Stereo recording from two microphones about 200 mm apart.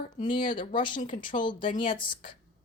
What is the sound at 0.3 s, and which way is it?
A woman's voice, 25° left (ahead or behind).